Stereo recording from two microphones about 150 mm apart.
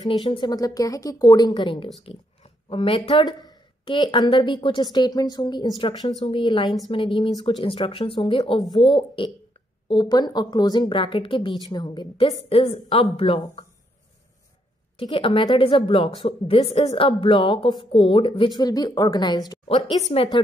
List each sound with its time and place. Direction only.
0.3 s a woman's voice: 30° left (ahead or behind)
15.0 s a woman's voice: 35° left (ahead or behind)
20.1 s a woman's voice: 40° left (ahead or behind)